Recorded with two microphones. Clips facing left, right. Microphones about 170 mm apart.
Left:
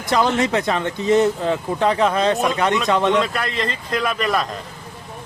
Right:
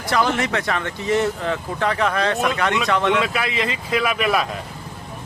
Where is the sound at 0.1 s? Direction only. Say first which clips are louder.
Left 3 dB; 25° left (ahead or behind).